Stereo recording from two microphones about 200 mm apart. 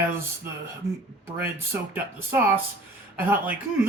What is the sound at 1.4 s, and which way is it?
Speech, 10° right (ahead or behind).